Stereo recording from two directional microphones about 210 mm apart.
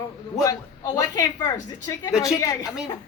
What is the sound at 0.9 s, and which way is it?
A woman's voice, 15° left (ahead or behind).